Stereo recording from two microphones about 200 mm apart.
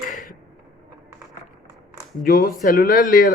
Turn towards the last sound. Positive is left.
turn(degrees=45)  # may be behind; listen again after turning